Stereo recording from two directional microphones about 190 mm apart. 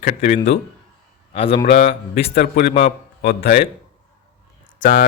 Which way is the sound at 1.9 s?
30° left (ahead or behind).